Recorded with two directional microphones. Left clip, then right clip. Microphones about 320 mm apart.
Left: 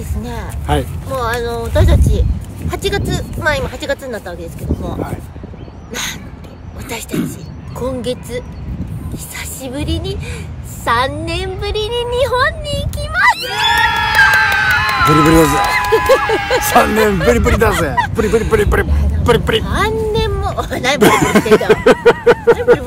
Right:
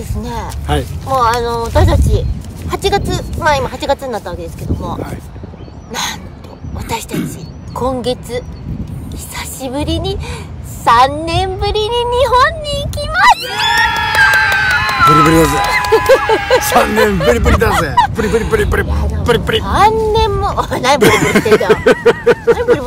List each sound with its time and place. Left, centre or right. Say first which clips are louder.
0.2 s speech: right 4 dB; centre
0.7 s speech: left 1 dB; centre
1.1 s speech: right 6 dB; centre
6.0 s speech: right 3 dB; centre
13.4 s speech: right 1 dB; centre
19.6 s speech: right 6 dB; centre
21.0 s speech: right 1 dB; centre